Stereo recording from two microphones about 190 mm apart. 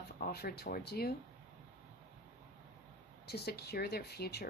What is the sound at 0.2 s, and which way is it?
Speech, 55° left (ahead or behind).